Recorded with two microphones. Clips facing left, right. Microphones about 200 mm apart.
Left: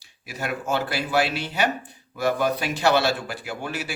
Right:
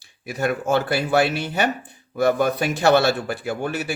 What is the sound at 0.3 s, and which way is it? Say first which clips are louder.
Speech: right 6 dB; 50° right (ahead or behind).